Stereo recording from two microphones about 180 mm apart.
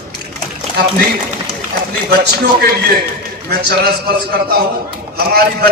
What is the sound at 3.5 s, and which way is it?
Speech, 60° right (ahead or behind).